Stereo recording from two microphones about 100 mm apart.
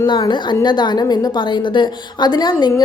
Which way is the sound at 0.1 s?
50° left (ahead or behind).